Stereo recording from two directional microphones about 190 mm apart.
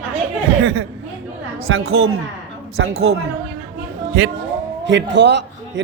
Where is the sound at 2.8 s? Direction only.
60° right (ahead or behind).